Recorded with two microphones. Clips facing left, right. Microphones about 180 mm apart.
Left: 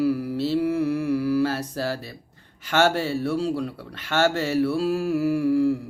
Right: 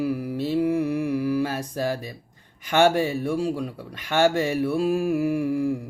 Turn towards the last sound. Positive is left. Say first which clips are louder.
# left 3 dB
turn(degrees=-15)  # may be behind; listen again after turning